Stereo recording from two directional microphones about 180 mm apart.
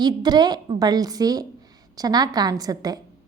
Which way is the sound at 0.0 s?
25° right (ahead or behind).